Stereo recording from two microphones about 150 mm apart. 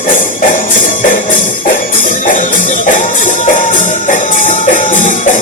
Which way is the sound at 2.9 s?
60° left (ahead or behind).